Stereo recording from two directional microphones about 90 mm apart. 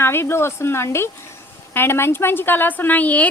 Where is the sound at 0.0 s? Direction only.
25° left (ahead or behind).